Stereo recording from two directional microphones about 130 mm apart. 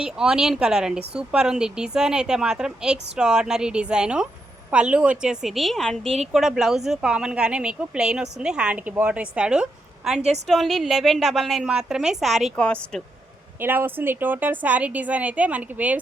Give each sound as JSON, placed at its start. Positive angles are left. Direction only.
{"t": 0.0, "sound": "a woman's voice", "side_deg": -5}
{"t": 10.2, "sound": "a woman's voice", "side_deg": -60}
{"t": 10.4, "sound": "a woman's voice", "side_deg": 0}
{"t": 13.6, "sound": "a woman's voice", "side_deg": -15}